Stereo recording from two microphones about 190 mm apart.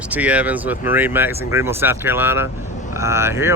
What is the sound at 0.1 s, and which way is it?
Speech, 5° right (ahead or behind).